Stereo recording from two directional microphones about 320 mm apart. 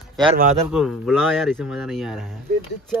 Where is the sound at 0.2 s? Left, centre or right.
Centre.